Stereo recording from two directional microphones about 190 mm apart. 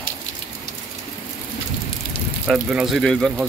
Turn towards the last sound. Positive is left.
turn(degrees=0)  # may be behind; listen again after turning